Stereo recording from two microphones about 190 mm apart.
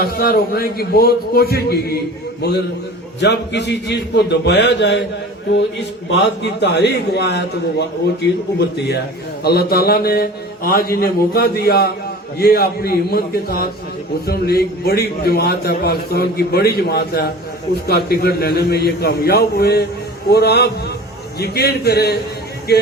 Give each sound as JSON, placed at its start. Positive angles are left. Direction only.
{"t": 0.0, "sound": "a man's voice", "side_deg": 55}
{"t": 6.1, "sound": "a man's voice", "side_deg": 65}
{"t": 9.4, "sound": "a man's voice", "side_deg": 55}